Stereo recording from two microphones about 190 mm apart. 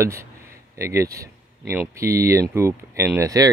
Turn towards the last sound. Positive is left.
turn(degrees=-15)  # may be behind; listen again after turning